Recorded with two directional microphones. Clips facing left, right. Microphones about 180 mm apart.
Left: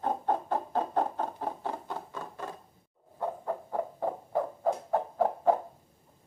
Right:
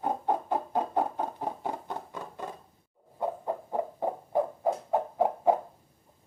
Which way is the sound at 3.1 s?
15° right (ahead or behind).